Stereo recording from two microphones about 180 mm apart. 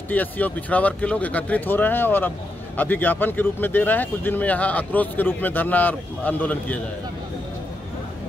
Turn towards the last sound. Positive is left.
turn(degrees=10)  # may be behind; listen again after turning